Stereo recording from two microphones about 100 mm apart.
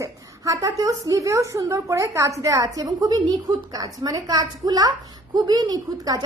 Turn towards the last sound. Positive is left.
turn(degrees=-40)  # may be behind; listen again after turning